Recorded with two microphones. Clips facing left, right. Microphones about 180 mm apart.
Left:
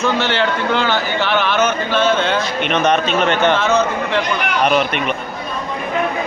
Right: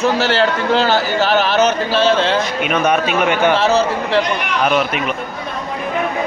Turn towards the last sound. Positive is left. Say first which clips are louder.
# even
turn(degrees=-5)  # may be behind; listen again after turning